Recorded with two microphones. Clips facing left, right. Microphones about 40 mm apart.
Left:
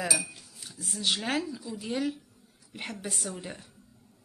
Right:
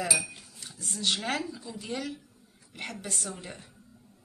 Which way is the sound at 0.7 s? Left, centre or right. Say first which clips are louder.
Even; centre.